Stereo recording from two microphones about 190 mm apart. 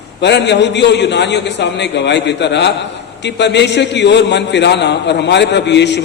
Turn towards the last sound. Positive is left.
turn(degrees=65)  # may be behind; listen again after turning